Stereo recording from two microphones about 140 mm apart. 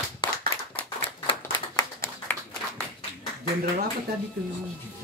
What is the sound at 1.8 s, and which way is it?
Clapping, 20° left (ahead or behind).